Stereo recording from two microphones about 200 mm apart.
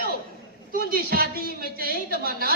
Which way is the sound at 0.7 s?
50° right (ahead or behind).